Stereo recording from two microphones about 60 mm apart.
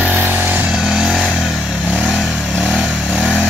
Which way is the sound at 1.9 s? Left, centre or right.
Centre.